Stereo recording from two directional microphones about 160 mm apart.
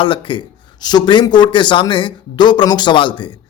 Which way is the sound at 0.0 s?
30° left (ahead or behind).